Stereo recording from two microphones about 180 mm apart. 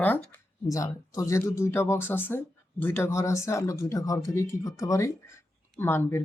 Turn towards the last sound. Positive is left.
turn(degrees=15)  # may be behind; listen again after turning